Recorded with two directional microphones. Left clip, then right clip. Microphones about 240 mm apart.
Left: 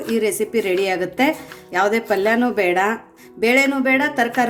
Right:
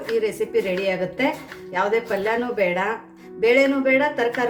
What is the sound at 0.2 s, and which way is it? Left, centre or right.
Speech, left.